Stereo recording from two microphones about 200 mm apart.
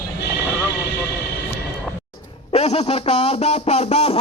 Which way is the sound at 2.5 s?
30° left (ahead or behind).